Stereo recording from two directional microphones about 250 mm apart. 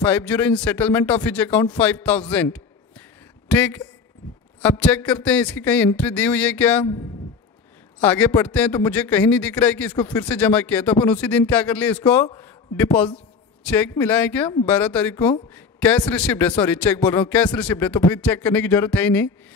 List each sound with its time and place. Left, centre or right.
0.0 s a man's voice: centre
8.0 s a man's voice: centre